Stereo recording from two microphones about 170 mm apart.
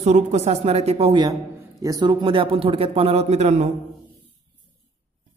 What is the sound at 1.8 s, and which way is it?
A man's voice, 25° right (ahead or behind).